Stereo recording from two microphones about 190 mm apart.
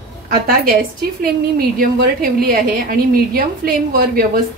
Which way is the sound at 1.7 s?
50° right (ahead or behind).